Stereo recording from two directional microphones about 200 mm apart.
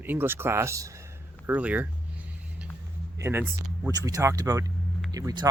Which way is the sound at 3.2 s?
10° right (ahead or behind).